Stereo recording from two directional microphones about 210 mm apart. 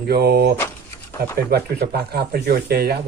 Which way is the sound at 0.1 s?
50° right (ahead or behind).